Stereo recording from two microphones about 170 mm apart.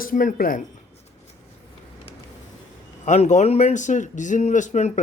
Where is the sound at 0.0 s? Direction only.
50° left (ahead or behind).